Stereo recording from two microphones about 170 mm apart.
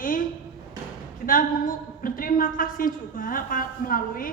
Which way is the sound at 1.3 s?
55° left (ahead or behind).